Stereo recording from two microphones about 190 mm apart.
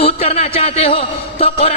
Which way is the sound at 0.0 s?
30° left (ahead or behind).